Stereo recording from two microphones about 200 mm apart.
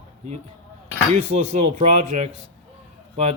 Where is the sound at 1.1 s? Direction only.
35° right (ahead or behind).